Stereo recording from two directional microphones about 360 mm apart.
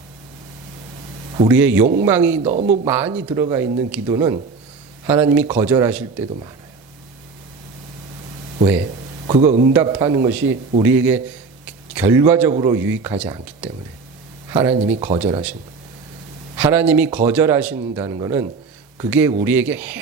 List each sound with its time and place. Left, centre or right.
1.4 s speech: centre
2.4 s speech: centre
2.8 s speech: centre
9.2 s speech: centre
9.7 s speech: centre
15.2 s speech: centre
16.6 s speech: centre